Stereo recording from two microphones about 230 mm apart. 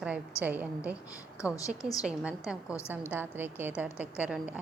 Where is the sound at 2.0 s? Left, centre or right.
Centre.